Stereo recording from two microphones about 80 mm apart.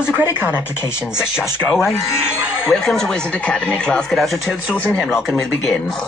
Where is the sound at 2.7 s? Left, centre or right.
Centre.